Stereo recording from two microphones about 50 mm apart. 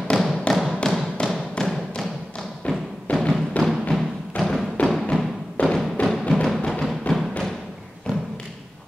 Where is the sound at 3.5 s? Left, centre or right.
Left.